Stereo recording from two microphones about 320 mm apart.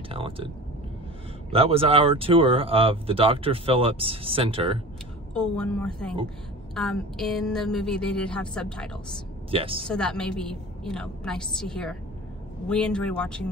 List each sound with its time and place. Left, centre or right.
0.1 s speech: centre
1.5 s speech: centre
5.3 s a woman's voice: centre
9.5 s speech: centre
9.8 s a woman's voice: centre